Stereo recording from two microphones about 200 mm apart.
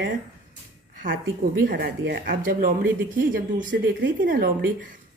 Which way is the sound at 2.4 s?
45° right (ahead or behind).